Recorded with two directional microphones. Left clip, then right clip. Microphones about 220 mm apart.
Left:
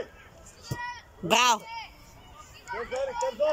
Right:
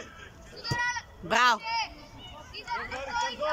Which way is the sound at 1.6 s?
45° right (ahead or behind).